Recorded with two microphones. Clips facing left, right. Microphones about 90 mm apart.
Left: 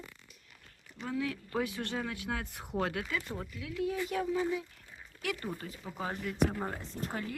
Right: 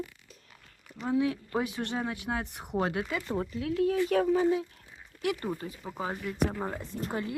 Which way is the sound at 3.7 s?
55° right (ahead or behind).